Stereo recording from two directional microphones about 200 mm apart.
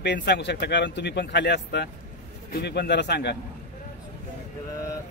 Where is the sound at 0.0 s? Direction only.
55° left (ahead or behind).